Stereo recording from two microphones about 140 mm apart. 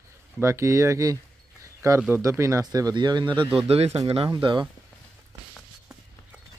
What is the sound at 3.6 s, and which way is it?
Speech, 45° right (ahead or behind).